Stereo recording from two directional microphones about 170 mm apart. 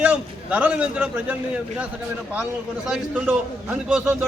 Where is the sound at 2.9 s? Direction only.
10° right (ahead or behind).